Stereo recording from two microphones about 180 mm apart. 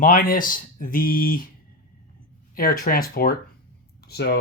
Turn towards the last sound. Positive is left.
turn(degrees=65)  # may be behind; listen again after turning